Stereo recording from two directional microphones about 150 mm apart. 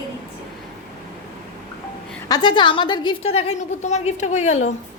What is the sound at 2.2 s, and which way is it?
A woman's voice, 30° left (ahead or behind).